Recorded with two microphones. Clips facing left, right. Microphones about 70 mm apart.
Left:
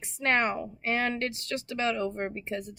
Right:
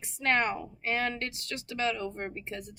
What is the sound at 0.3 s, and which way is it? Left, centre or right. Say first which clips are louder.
Speech: left 2 dB; left.